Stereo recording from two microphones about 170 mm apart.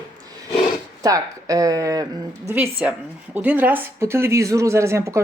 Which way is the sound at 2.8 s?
5° right (ahead or behind).